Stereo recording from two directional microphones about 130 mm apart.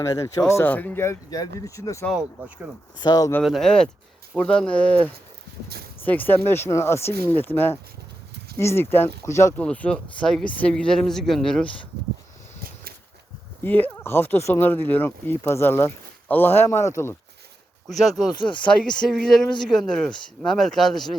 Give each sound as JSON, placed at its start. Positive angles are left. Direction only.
{"t": 0.0, "sound": "speech", "side_deg": 25}
{"t": 2.0, "sound": "speech", "side_deg": -5}
{"t": 3.0, "sound": "speech", "side_deg": 30}
{"t": 3.4, "sound": "speech", "side_deg": 0}
{"t": 9.6, "sound": "speech", "side_deg": 10}
{"t": 13.6, "sound": "speech", "side_deg": 15}
{"t": 17.8, "sound": "speech", "side_deg": 0}